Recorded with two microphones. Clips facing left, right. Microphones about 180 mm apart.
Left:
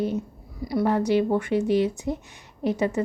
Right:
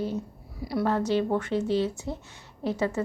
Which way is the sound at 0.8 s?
15° left (ahead or behind).